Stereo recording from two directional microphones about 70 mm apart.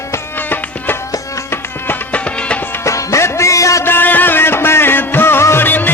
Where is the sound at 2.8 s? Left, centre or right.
Left.